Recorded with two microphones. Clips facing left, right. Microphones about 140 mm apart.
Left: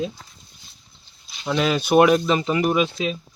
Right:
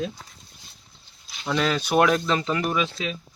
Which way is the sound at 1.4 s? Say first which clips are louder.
Left 3 dB; 5° left (ahead or behind).